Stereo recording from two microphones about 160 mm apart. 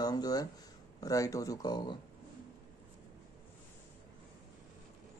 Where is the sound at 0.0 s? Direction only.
25° left (ahead or behind).